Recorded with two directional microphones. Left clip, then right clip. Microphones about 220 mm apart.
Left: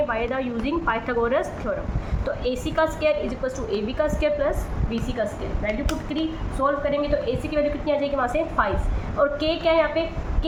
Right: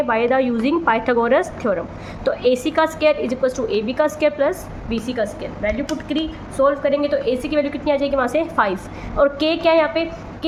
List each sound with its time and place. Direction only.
0.1 s a woman's voice: 55° right (ahead or behind)